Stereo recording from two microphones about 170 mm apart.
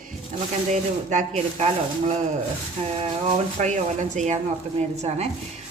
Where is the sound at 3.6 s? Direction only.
45° right (ahead or behind).